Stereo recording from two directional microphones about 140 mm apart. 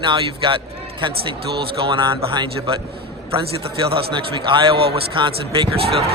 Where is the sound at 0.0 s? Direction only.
35° right (ahead or behind).